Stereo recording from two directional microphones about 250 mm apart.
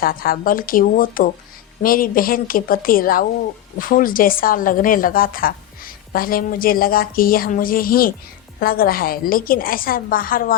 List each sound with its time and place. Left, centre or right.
0.0 s a woman's voice: left